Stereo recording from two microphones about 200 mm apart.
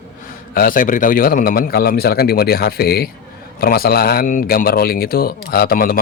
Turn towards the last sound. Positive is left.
turn(degrees=45)  # may be behind; listen again after turning